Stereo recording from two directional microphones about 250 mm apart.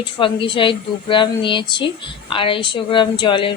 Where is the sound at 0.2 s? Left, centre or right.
Centre.